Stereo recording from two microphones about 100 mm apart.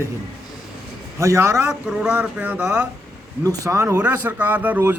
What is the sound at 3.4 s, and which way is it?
A man's voice, 35° right (ahead or behind).